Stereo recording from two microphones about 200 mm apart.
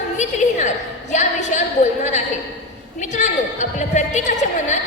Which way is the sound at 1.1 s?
35° left (ahead or behind).